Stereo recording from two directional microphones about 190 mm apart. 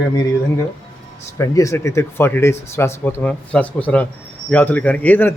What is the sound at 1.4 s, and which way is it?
Speech, 15° left (ahead or behind).